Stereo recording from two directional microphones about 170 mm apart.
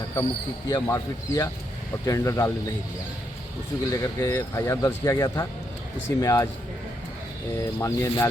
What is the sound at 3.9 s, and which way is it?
Speech, 20° left (ahead or behind).